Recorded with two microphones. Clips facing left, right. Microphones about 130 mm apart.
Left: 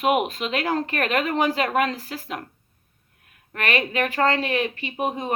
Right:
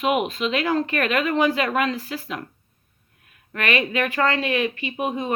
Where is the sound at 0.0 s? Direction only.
45° left (ahead or behind).